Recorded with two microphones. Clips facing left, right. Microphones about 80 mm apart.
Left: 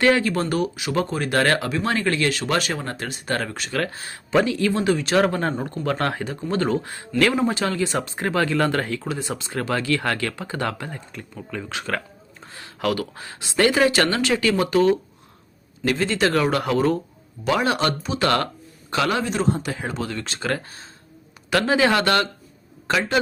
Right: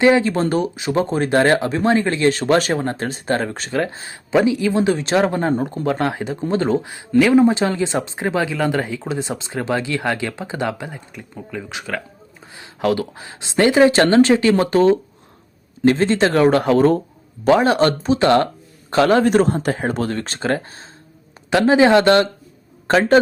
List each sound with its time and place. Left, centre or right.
0.0 s speech: right
18.9 s speech: right
19.2 s speech: right
22.9 s a man's voice: right